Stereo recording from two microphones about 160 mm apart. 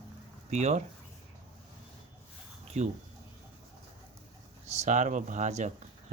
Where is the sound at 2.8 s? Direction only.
45° right (ahead or behind).